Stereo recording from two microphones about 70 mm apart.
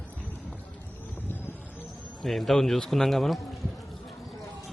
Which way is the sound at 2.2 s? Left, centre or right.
Centre.